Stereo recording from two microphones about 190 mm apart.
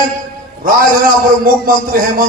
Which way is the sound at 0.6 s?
50° right (ahead or behind).